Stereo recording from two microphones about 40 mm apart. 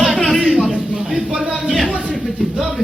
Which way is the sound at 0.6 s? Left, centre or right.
Centre.